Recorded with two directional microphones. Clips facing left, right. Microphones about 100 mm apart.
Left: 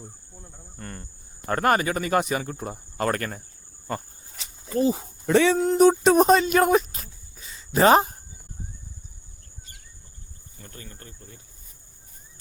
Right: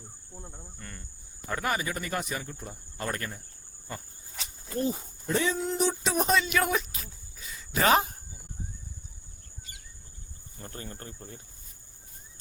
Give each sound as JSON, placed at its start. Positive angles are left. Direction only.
{"t": 0.3, "sound": "cricket", "side_deg": -15}
{"t": 0.8, "sound": "cricket", "side_deg": 45}
{"t": 1.5, "sound": "speech", "side_deg": 55}
{"t": 4.7, "sound": "speech", "side_deg": 90}
{"t": 5.6, "sound": "speech", "side_deg": 45}
{"t": 10.6, "sound": "speech", "side_deg": -35}